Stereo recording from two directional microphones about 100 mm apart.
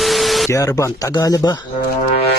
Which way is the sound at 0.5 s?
30° left (ahead or behind).